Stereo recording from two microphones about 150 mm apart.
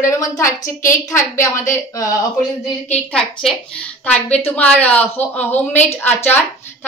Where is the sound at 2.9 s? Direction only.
5° left (ahead or behind).